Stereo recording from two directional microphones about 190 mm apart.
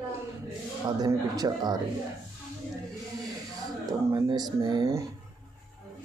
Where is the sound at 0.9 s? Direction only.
20° right (ahead or behind).